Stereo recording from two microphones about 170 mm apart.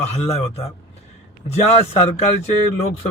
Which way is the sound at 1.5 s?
40° left (ahead or behind).